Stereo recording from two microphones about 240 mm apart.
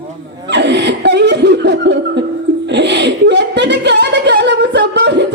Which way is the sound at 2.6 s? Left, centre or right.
Right.